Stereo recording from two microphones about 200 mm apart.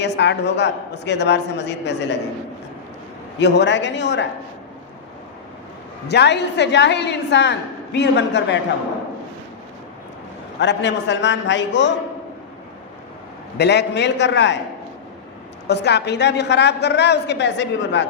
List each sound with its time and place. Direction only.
0.0 s a woman's voice: 60° left (ahead or behind)
3.3 s a woman's voice: 60° left (ahead or behind)
6.1 s a woman's voice: 55° left (ahead or behind)
10.6 s a woman's voice: 60° left (ahead or behind)
13.6 s a woman's voice: 55° left (ahead or behind)
15.6 s a woman's voice: 55° left (ahead or behind)